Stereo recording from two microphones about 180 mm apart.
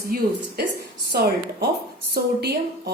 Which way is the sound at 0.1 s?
55° right (ahead or behind).